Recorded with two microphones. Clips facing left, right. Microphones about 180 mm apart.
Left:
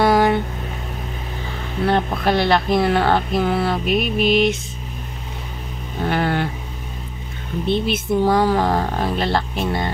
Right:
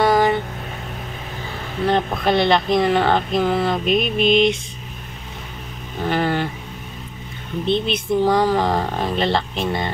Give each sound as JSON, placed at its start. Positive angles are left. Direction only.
{"t": 0.0, "sound": "a sound", "side_deg": 10}
{"t": 2.2, "sound": "speech", "side_deg": 10}
{"t": 6.0, "sound": "speech", "side_deg": 10}
{"t": 7.6, "sound": "speech", "side_deg": 10}